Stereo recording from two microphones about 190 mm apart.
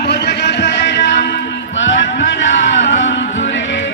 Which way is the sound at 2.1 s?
75° left (ahead or behind).